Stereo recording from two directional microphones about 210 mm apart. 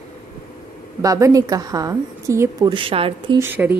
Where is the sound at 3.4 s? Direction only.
10° right (ahead or behind).